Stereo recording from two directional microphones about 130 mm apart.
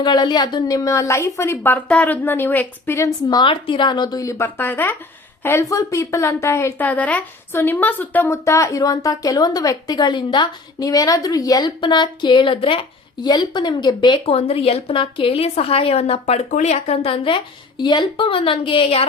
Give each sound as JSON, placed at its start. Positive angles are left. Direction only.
{"t": 0.0, "sound": "a woman's voice", "side_deg": 35}
{"t": 3.2, "sound": "a woman's voice", "side_deg": 35}
{"t": 14.3, "sound": "a woman's voice", "side_deg": 50}
{"t": 16.5, "sound": "a woman's voice", "side_deg": 65}